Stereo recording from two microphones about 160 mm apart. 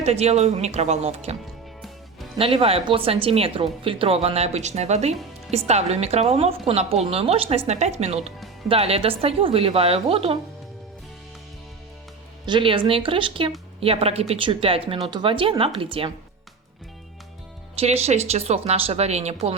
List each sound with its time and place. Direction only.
0.0 s speech: 40° right (ahead or behind)
2.4 s speech: 35° right (ahead or behind)
12.5 s speech: 30° right (ahead or behind)
17.7 s speech: 40° right (ahead or behind)